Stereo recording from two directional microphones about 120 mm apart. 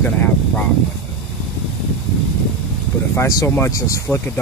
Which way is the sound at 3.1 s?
25° left (ahead or behind).